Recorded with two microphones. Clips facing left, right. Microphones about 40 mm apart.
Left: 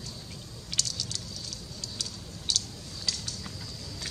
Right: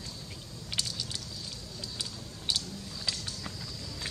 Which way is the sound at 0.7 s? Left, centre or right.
Centre.